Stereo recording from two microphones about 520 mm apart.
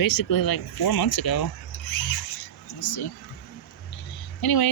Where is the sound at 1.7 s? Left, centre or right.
Left.